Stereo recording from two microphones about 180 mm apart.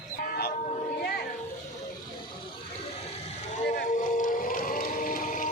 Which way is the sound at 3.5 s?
45° left (ahead or behind).